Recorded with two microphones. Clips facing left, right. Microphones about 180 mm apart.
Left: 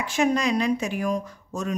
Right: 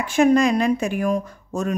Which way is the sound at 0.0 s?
50° right (ahead or behind).